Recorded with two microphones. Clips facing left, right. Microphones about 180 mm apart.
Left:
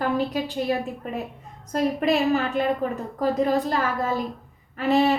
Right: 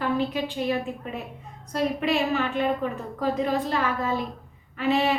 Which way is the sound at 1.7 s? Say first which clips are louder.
Left 3 dB; 40° left (ahead or behind).